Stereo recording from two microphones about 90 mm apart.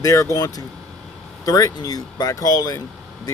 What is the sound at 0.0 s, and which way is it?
Speech, 40° left (ahead or behind).